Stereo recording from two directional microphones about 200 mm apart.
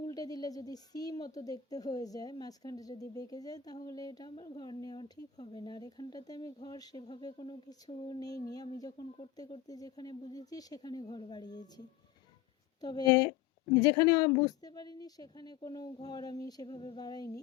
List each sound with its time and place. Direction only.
0.0 s speech: 20° left (ahead or behind)
12.8 s speech: 20° left (ahead or behind)